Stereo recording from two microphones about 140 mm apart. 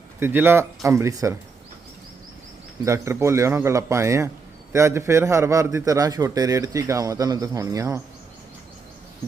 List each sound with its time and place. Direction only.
0.2 s a man's voice: 15° right (ahead or behind)
2.8 s a man's voice: 20° right (ahead or behind)